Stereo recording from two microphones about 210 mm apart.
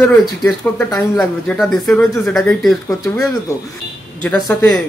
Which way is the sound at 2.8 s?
15° left (ahead or behind).